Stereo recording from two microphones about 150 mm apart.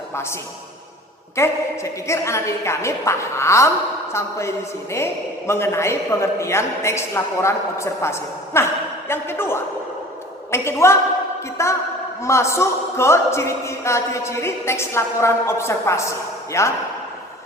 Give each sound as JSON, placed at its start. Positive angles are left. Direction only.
{"t": 0.1, "sound": "a man's voice", "side_deg": 15}
{"t": 1.4, "sound": "a man's voice", "side_deg": 20}